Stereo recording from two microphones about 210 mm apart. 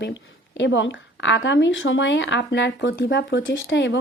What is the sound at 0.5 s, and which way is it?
Speech, 60° left (ahead or behind).